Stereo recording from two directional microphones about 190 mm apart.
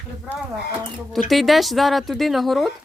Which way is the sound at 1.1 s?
Centre (ahead or behind).